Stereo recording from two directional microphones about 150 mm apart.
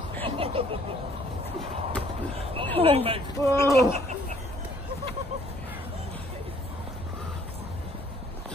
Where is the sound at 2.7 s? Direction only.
40° right (ahead or behind).